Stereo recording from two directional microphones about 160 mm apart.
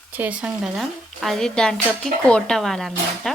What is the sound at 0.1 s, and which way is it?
Speech, 10° right (ahead or behind).